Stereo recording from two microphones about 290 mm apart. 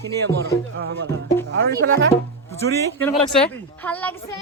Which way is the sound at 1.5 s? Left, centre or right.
Right.